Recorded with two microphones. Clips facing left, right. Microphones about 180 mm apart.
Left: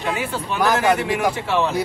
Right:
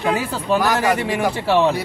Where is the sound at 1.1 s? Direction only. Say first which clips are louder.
Right 3 dB; 35° right (ahead or behind).